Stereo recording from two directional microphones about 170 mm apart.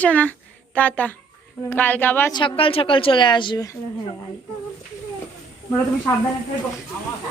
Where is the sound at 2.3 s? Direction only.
30° left (ahead or behind).